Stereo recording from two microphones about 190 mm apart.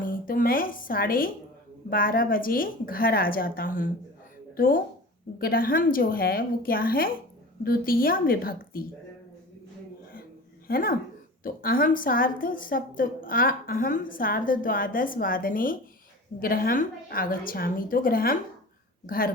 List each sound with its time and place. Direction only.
0.0 s a sound: 45° left (ahead or behind)
1.9 s a woman's voice: 50° left (ahead or behind)
10.7 s a woman's voice: 50° left (ahead or behind)